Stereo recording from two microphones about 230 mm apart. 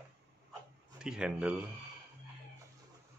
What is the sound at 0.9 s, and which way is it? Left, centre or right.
Speech, centre.